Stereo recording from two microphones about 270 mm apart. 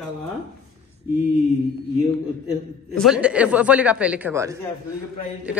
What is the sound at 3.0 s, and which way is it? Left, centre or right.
A man's voice, centre.